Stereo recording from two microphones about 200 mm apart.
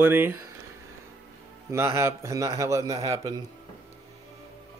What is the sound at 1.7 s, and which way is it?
A man's voice, 15° right (ahead or behind).